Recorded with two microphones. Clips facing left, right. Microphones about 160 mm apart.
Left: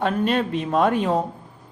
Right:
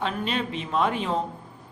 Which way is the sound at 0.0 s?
50° left (ahead or behind).